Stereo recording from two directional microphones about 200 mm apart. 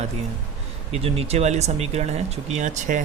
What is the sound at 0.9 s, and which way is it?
Speech, 30° right (ahead or behind).